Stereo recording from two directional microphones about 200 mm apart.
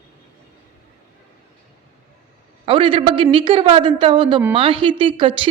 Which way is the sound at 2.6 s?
25° right (ahead or behind).